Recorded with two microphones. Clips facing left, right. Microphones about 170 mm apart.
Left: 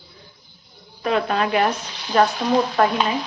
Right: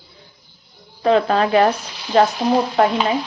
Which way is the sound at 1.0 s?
30° right (ahead or behind).